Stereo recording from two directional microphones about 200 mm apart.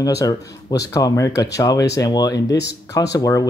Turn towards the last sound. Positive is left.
turn(degrees=15)  # may be behind; listen again after turning